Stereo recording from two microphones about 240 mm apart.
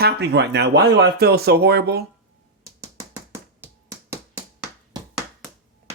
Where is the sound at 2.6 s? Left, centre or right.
Centre.